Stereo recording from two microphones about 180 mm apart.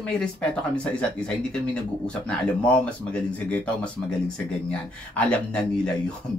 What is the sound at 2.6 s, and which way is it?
Speech, 5° left (ahead or behind).